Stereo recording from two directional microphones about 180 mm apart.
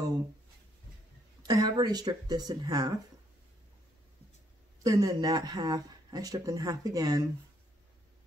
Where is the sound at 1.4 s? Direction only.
20° right (ahead or behind).